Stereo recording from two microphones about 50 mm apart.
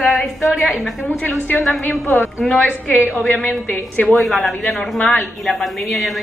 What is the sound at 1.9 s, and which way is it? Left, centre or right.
Speech, left.